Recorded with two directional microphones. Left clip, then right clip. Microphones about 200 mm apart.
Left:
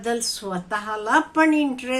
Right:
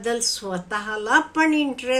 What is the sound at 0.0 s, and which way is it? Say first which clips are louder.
A woman's voice: right 1 dB; 5° right (ahead or behind).